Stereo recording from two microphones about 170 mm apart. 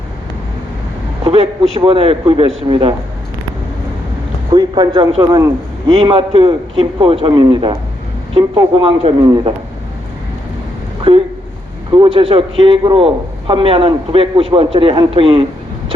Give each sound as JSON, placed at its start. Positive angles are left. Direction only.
{"t": 1.2, "sound": "a man's voice", "side_deg": -35}
{"t": 4.5, "sound": "a man's voice", "side_deg": -25}
{"t": 11.1, "sound": "a man's voice", "side_deg": -30}